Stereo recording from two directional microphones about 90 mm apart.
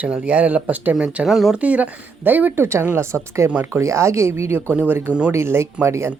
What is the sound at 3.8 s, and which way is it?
Speech, 35° right (ahead or behind).